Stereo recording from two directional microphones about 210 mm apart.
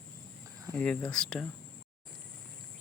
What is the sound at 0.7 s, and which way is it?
Speech, 5° left (ahead or behind).